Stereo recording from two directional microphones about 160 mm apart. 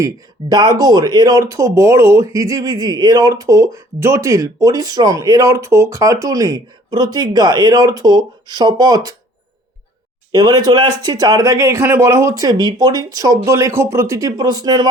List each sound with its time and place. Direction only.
0.0 s speech: 25° right (ahead or behind)
10.3 s speech: 25° right (ahead or behind)